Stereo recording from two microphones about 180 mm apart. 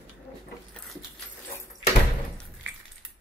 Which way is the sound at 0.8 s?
5° left (ahead or behind).